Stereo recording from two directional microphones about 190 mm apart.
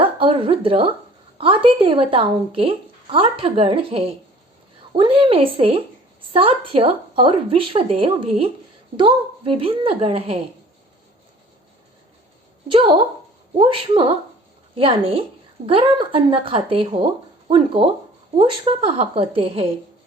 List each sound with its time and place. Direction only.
0.0 s a sound: 30° right (ahead or behind)
1.4 s a woman's voice: 25° right (ahead or behind)
12.6 s a woman's voice: 25° right (ahead or behind)